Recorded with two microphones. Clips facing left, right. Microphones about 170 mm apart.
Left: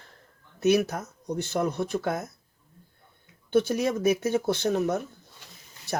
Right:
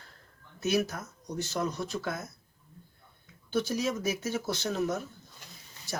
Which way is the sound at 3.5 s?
60° left (ahead or behind).